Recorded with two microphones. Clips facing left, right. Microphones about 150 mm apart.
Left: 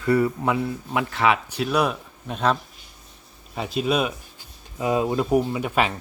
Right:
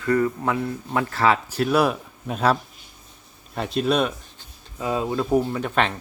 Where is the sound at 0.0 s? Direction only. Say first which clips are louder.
Left 1 dB; 10° left (ahead or behind).